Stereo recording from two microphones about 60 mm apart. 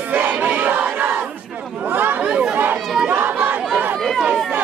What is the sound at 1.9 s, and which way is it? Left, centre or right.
Chatter, right.